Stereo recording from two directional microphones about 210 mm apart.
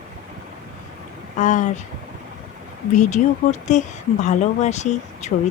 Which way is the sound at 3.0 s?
35° left (ahead or behind).